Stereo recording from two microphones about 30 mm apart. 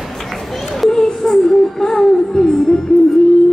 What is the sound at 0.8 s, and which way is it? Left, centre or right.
Music, centre.